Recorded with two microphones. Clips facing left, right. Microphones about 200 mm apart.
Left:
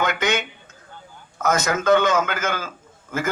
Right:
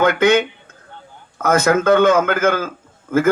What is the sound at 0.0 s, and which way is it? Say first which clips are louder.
A man's voice: right 9 dB; 55° right (ahead or behind).